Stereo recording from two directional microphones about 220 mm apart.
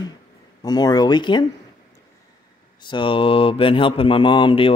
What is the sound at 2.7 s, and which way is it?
Mantra, 20° left (ahead or behind).